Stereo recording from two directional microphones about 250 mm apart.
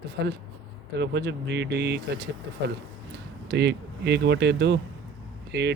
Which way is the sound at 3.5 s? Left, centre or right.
Right.